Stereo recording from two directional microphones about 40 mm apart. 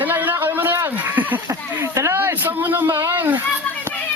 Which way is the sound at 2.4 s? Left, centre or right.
Right.